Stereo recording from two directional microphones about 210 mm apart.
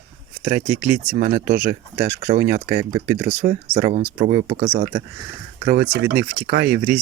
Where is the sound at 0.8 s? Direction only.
10° right (ahead or behind).